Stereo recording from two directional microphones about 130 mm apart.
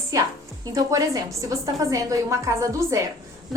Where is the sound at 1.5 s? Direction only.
25° right (ahead or behind).